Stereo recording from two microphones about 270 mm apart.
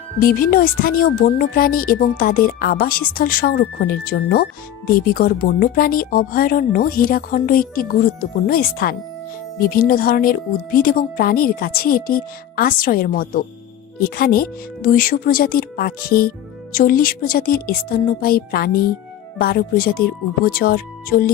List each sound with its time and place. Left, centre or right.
0.2 s speech: left